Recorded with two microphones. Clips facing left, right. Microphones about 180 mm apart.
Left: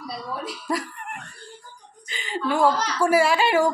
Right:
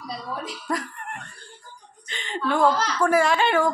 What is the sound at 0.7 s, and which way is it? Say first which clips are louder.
Speech: left 1 dB; 10° left (ahead or behind).